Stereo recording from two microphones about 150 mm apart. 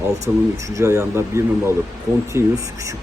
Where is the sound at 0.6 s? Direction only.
20° right (ahead or behind).